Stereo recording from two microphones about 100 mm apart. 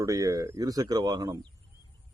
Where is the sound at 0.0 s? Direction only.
35° right (ahead or behind).